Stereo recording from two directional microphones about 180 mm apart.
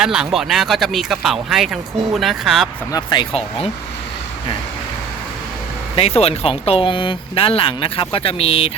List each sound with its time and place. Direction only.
0.0 s speech: 5° right (ahead or behind)
2.9 s speech: 25° left (ahead or behind)
6.0 s speech: 35° left (ahead or behind)